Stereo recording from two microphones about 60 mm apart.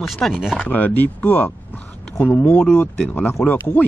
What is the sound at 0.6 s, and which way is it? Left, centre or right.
Speech, left.